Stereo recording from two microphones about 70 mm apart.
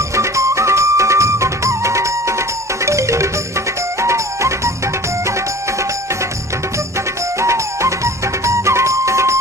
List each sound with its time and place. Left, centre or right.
0.2 s music: right
7.3 s music: right